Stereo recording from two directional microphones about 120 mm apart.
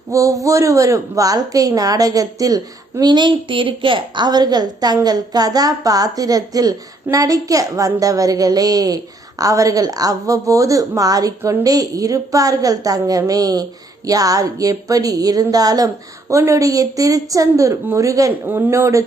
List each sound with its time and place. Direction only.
0.1 s a woman's voice: 25° right (ahead or behind)